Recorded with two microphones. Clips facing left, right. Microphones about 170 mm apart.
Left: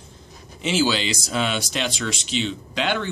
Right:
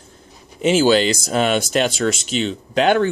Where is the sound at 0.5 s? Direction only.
50° right (ahead or behind).